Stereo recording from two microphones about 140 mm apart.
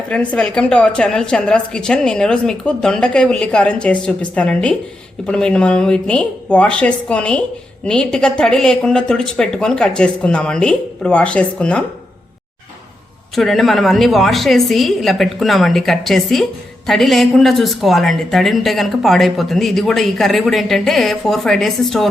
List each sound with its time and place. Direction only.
0.1 s a woman's voice: 10° left (ahead or behind)
13.3 s a woman's voice: centre (ahead or behind)